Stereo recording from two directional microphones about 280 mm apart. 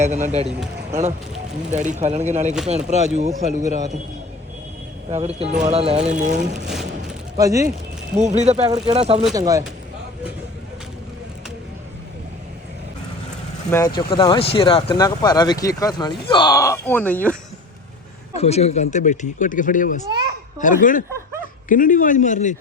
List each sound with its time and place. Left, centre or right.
0.0 s speech: right
1.7 s speech: right
5.1 s speech: right
6.7 s a sound: centre
7.3 s speech: centre
8.4 s speech: right
13.7 s speech: centre
18.3 s speech: left